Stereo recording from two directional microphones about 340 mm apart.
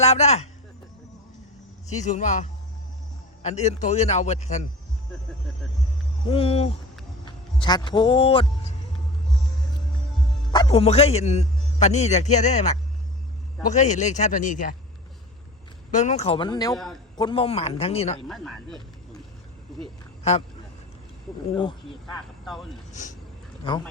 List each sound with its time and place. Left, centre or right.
0.0 s speech: centre
2.0 s a man's voice: left
6.2 s speech: centre
10.5 s a man's voice: centre
15.9 s speech: left
16.7 s speech: centre
17.2 s speech: centre
18.3 s speech: centre
21.6 s speech: centre
22.0 s speech: centre
22.9 s speech: left